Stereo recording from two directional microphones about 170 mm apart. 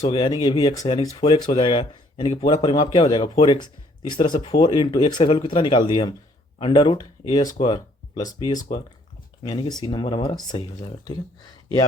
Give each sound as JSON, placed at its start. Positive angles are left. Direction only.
{"t": 0.1, "sound": "speech", "side_deg": 25}